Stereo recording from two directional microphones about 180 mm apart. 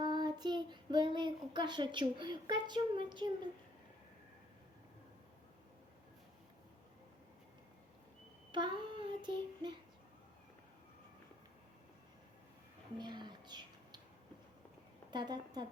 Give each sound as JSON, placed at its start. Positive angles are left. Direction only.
{"t": 0.0, "sound": "child singing", "side_deg": -25}
{"t": 8.5, "sound": "child singing", "side_deg": -25}
{"t": 13.0, "sound": "a sound", "side_deg": -25}
{"t": 15.1, "sound": "a woman's voice", "side_deg": -25}